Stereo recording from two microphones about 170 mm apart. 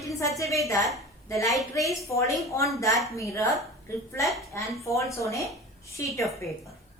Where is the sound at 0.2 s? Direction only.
20° left (ahead or behind).